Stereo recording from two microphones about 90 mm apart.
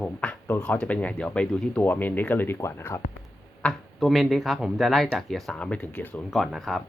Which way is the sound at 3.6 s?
10° left (ahead or behind).